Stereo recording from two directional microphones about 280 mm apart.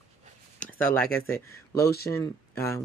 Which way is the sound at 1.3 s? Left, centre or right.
Centre.